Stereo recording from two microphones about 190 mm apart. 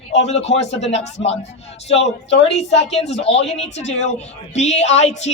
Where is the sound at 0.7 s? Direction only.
70° left (ahead or behind).